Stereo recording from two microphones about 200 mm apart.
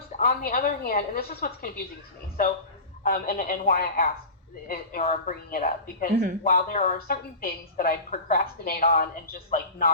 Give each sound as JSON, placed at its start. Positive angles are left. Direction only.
{"t": 0.2, "sound": "speech", "side_deg": 45}
{"t": 3.0, "sound": "speech", "side_deg": 45}